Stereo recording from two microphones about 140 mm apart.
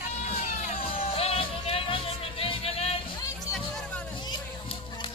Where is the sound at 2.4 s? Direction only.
45° left (ahead or behind).